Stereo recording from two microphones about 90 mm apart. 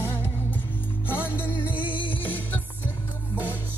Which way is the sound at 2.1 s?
20° left (ahead or behind).